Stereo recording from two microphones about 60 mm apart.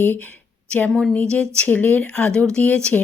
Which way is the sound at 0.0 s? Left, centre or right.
Left.